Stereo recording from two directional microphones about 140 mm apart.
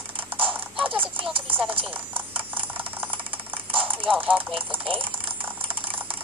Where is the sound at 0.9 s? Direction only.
40° right (ahead or behind).